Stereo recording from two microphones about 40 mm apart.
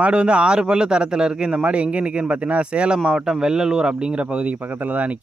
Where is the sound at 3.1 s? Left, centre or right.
Centre.